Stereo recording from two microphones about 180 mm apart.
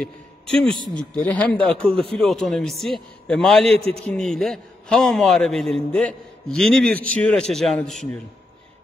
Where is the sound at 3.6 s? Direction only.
35° right (ahead or behind).